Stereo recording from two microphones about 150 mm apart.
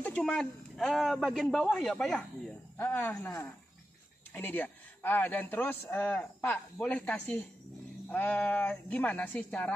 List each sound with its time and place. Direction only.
0.0 s a man's voice: 5° left (ahead or behind)
2.8 s a man's voice: 10° left (ahead or behind)